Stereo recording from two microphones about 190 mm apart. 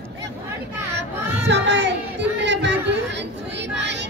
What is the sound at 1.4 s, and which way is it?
Music, 65° right (ahead or behind).